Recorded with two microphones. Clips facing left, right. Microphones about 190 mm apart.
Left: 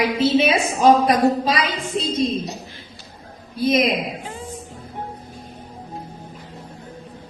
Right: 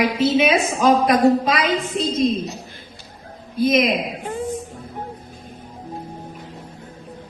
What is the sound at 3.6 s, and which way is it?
Speech, 30° left (ahead or behind).